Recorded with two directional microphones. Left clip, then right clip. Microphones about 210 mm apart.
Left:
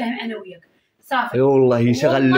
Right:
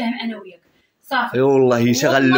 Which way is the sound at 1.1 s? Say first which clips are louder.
Even; 5° left (ahead or behind).